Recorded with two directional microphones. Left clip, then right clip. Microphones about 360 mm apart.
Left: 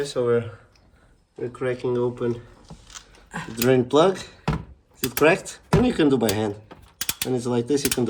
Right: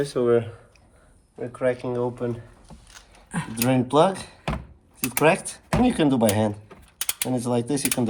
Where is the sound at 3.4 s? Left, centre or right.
Centre.